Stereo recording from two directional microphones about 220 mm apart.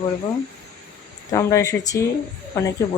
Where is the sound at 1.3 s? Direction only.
15° left (ahead or behind).